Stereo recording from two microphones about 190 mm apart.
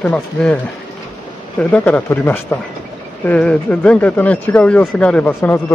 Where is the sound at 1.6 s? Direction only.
5° left (ahead or behind).